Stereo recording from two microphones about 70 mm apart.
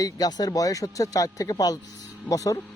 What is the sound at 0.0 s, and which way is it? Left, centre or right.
Speech, left.